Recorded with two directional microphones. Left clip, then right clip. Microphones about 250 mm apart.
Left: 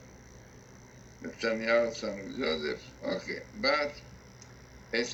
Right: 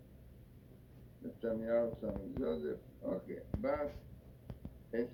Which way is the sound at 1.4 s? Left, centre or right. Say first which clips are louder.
Left 8 dB; left.